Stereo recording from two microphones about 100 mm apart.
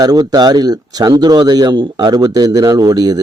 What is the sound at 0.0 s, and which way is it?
Speech, 40° right (ahead or behind).